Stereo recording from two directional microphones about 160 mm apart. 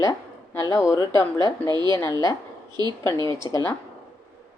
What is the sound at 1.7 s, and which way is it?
Speech, 25° right (ahead or behind).